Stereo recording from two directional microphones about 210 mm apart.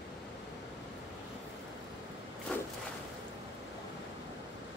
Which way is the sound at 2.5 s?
5° left (ahead or behind).